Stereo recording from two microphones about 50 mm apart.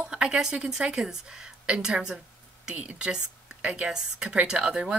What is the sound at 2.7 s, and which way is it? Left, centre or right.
Speech, right.